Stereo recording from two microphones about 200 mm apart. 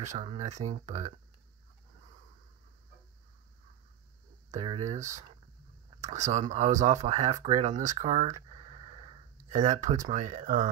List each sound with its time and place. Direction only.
0.0 s speech: 35° right (ahead or behind)
4.5 s speech: 35° right (ahead or behind)
9.5 s speech: 40° right (ahead or behind)